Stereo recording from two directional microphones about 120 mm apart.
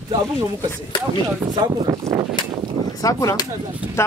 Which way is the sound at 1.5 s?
30° right (ahead or behind).